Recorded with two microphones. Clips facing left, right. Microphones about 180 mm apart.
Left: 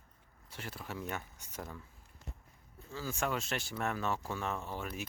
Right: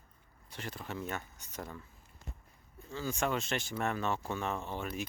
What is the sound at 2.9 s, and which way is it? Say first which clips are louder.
Speech: right 2 dB; 5° left (ahead or behind).